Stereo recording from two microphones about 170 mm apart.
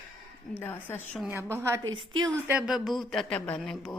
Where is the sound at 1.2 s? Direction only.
15° right (ahead or behind).